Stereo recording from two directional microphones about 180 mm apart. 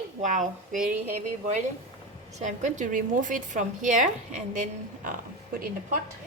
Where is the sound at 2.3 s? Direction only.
40° right (ahead or behind).